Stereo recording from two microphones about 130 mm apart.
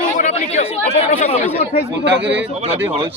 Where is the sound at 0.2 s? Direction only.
60° left (ahead or behind).